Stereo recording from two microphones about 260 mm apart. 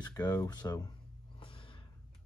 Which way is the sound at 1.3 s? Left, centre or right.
Left.